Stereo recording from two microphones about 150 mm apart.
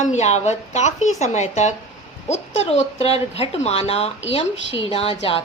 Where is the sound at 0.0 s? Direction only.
50° left (ahead or behind).